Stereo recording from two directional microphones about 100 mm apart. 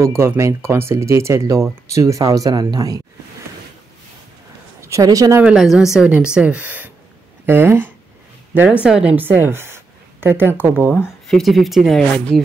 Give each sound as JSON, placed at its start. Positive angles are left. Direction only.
{"t": 0.0, "sound": "speech", "side_deg": -25}
{"t": 4.8, "sound": "speech", "side_deg": -35}
{"t": 5.4, "sound": "speech", "side_deg": -5}
{"t": 8.5, "sound": "speech", "side_deg": -10}
{"t": 11.2, "sound": "speech", "side_deg": 0}